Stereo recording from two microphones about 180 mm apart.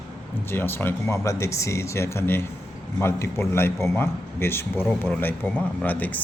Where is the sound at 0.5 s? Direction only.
10° left (ahead or behind).